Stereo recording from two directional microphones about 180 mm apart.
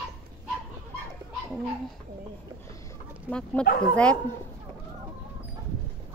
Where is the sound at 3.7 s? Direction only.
55° left (ahead or behind).